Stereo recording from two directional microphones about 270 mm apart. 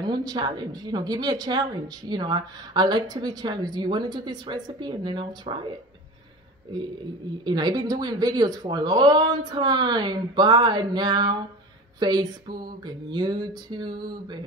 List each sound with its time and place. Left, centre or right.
0.0 s speech: centre
7.4 s speech: centre